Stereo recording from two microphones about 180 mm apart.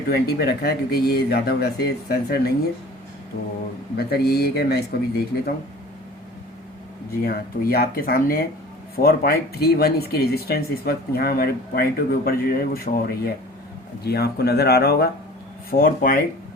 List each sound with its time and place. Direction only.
0.1 s speech: 60° left (ahead or behind)
3.9 s speech: 60° left (ahead or behind)
7.2 s speech: 55° left (ahead or behind)
15.7 s speech: 50° left (ahead or behind)